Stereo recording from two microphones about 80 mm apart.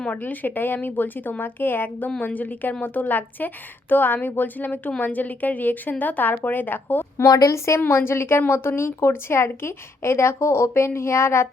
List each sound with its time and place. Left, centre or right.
0.0 s a woman's voice: centre
7.2 s a woman's voice: left